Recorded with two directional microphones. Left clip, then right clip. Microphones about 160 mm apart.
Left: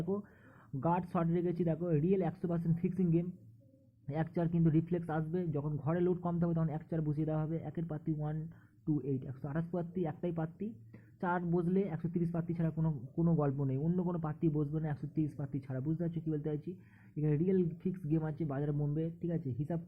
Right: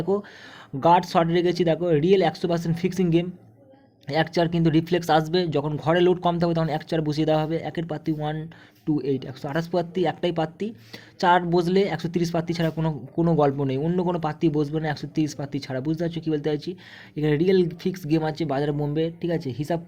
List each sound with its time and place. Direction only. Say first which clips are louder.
0.8 s a man's voice: right 16 dB; 30° right (ahead or behind)